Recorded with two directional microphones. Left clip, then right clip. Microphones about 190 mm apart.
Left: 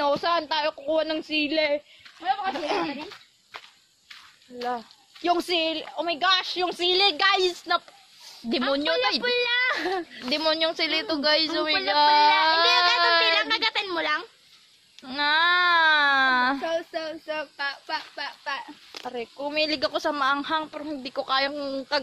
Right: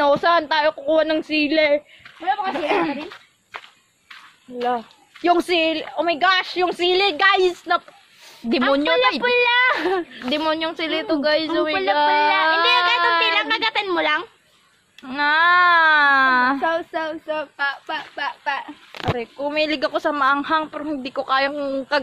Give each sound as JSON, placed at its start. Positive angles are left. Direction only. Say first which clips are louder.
{"t": 0.0, "sound": "a woman's voice", "louder": "right 7 dB", "side_deg": -5}
{"t": 8.7, "sound": "speech", "louder": "right 6 dB", "side_deg": 10}
{"t": 9.2, "sound": "a child's voice", "louder": "right 7 dB", "side_deg": -20}
{"t": 10.3, "sound": "a woman's voice", "louder": "right 2 dB", "side_deg": 20}
{"t": 13.3, "sound": "a woman's voice", "louder": "right 3 dB", "side_deg": 0}
{"t": 15.0, "sound": "speech", "louder": "right 5 dB", "side_deg": 20}
{"t": 16.6, "sound": "speech", "louder": "right 6 dB", "side_deg": 0}
{"t": 18.4, "sound": "speech", "louder": "right 6 dB", "side_deg": -35}
{"t": 19.3, "sound": "speech", "louder": "right 2 dB", "side_deg": 10}